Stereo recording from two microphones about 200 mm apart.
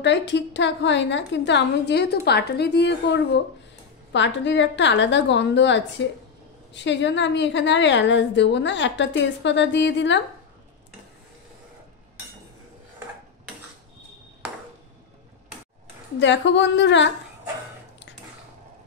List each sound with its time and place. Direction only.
0.0 s a woman's voice: 60° left (ahead or behind)
16.2 s a woman's voice: 65° left (ahead or behind)